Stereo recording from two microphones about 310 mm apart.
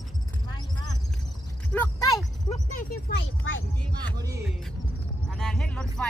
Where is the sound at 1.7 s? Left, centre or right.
Centre.